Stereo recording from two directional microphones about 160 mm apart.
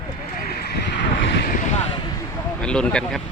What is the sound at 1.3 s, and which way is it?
Vehicle, 70° left (ahead or behind).